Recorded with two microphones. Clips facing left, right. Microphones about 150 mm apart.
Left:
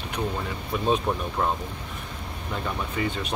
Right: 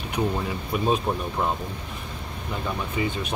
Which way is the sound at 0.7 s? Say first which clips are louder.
Right 2 dB; 10° right (ahead or behind).